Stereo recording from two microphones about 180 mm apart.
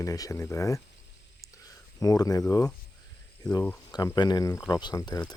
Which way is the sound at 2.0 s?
20° left (ahead or behind).